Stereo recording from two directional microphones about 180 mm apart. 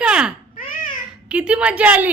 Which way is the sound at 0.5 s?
50° left (ahead or behind).